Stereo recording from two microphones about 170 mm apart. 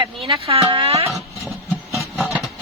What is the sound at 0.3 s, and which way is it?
Speech, 35° right (ahead or behind).